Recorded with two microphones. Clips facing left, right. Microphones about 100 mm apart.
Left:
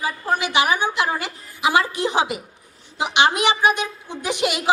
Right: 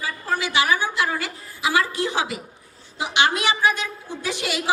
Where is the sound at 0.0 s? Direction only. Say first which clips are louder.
Left 3 dB; 20° left (ahead or behind).